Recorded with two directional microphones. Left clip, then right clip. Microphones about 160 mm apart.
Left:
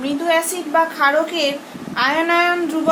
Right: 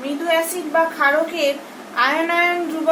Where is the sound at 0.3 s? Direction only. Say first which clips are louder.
Left 1 dB; 80° left.